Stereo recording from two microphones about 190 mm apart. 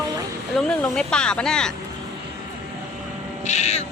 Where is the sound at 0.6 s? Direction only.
5° left (ahead or behind).